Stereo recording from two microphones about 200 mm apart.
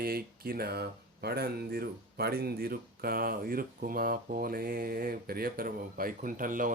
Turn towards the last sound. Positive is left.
turn(degrees=-40)  # may be behind; listen again after turning